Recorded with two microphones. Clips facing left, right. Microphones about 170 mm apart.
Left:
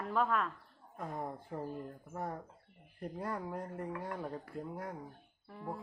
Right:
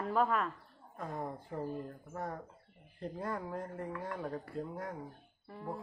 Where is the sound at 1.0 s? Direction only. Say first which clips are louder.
Right 1 dB; 15° left (ahead or behind).